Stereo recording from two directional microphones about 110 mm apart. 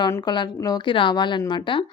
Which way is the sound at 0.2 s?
40° left (ahead or behind).